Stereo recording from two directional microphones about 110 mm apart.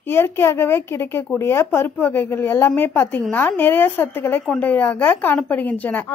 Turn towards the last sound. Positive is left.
turn(degrees=15)  # may be behind; listen again after turning